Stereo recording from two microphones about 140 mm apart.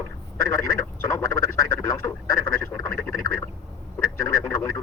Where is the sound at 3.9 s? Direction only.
20° left (ahead or behind).